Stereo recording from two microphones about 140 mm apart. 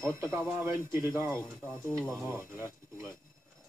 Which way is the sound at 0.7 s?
20° right (ahead or behind).